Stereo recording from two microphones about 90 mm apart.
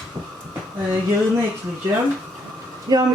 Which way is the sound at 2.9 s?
45° right (ahead or behind).